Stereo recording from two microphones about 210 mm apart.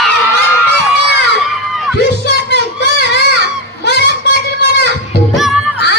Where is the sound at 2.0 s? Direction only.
55° left (ahead or behind).